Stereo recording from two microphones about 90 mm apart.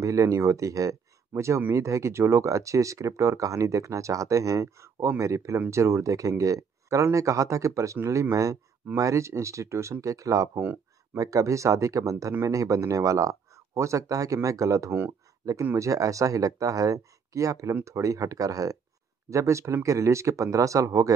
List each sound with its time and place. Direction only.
0.0 s speech: 35° right (ahead or behind)